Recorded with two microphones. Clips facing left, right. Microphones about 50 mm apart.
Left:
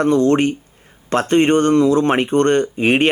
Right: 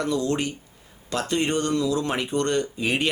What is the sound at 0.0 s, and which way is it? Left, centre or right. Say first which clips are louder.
Speech: left 10 dB; left.